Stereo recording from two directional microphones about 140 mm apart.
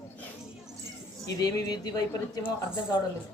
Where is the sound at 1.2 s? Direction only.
25° left (ahead or behind).